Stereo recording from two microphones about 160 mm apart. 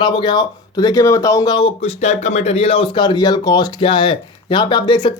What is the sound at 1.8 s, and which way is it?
Speech, 40° left (ahead or behind).